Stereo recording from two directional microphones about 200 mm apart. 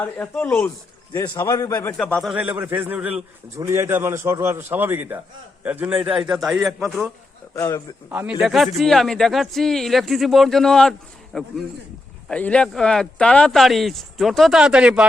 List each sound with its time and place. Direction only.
0.0 s a man's voice: 10° left (ahead or behind)
2.3 s a man's voice: 10° right (ahead or behind)
7.5 s a man's voice: 15° left (ahead or behind)
8.1 s a man's voice: 5° right (ahead or behind)